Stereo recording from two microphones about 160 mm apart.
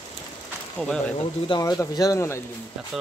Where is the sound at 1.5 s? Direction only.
20° left (ahead or behind).